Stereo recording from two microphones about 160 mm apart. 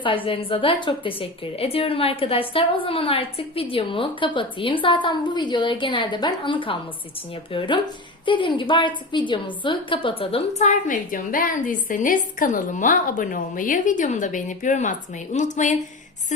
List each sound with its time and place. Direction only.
0.3 s a woman's voice: 35° left (ahead or behind)
8.2 s a woman's voice: 30° left (ahead or behind); by 15.8 s 50° left (ahead or behind)